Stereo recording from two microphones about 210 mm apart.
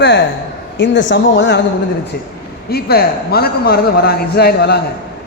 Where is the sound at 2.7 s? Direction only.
50° left (ahead or behind).